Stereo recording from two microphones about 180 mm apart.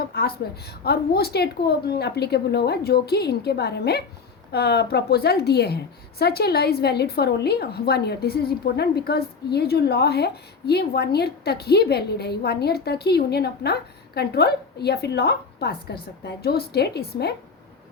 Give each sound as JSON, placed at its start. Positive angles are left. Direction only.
{"t": 0.1, "sound": "a woman's voice", "side_deg": 60}